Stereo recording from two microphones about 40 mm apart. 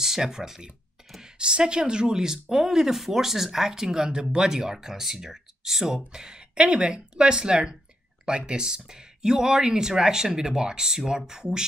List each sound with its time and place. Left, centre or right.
0.0 s speech: centre